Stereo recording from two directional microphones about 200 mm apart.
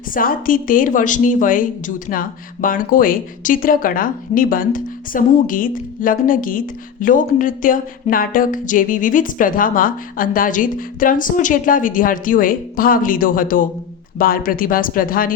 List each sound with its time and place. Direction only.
0.1 s speech: 45° left (ahead or behind)